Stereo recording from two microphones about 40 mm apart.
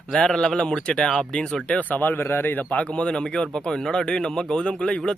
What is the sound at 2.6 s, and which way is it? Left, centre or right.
Speech, left.